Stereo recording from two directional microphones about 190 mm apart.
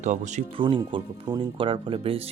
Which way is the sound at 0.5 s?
25° right (ahead or behind).